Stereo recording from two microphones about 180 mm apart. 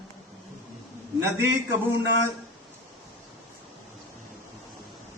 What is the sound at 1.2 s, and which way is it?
Speech, 15° right (ahead or behind).